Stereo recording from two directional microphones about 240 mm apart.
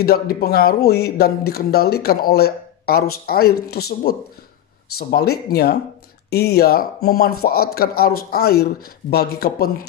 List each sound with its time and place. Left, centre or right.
0.0 s speech: left